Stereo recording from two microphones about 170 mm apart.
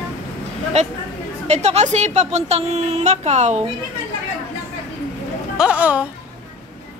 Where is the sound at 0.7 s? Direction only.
40° right (ahead or behind).